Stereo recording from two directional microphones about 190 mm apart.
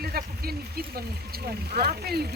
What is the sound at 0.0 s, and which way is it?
Speech, 55° right (ahead or behind).